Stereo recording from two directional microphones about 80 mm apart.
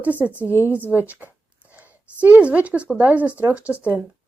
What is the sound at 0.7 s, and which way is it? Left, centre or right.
Speech, centre.